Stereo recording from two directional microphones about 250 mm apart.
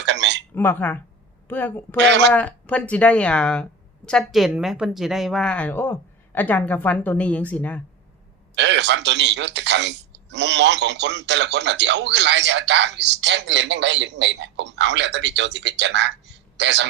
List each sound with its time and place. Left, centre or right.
0.0 s a sound: right
0.5 s a woman's voice: centre
2.0 s a man's voice: right
2.3 s speech: centre
8.5 s a man's voice: right